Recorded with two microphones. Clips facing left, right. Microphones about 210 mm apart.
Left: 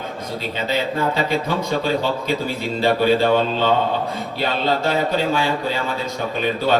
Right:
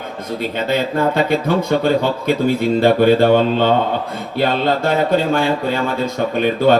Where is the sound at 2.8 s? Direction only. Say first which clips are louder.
Right 4 dB; 55° right (ahead or behind).